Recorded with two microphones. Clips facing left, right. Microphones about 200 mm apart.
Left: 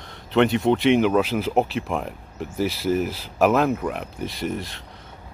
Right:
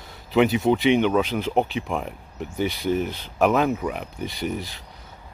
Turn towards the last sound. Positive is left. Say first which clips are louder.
# left 1 dB
turn(degrees=0)  # may be behind; listen again after turning